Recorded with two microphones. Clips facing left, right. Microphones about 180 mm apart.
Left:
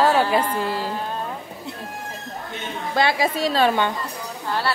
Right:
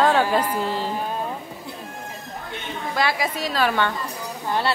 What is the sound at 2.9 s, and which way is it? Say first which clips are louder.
Speech: left 4 dB; 25° left (ahead or behind).